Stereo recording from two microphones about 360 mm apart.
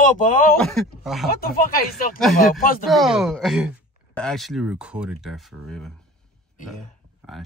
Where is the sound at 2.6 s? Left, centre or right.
Left.